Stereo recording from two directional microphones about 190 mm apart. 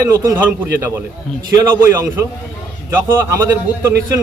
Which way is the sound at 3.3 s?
15° right (ahead or behind).